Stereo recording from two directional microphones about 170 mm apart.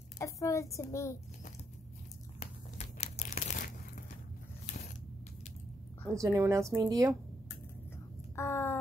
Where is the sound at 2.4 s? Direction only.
40° left (ahead or behind).